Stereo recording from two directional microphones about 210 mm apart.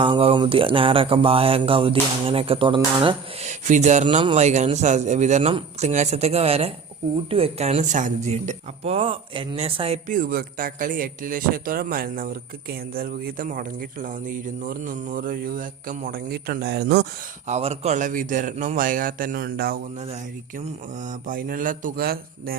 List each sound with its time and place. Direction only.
0.0 s speech: 25° right (ahead or behind)
10.1 s a man's voice: 40° right (ahead or behind)
17.4 s a man's voice: 30° right (ahead or behind)
21.2 s speech: 40° right (ahead or behind)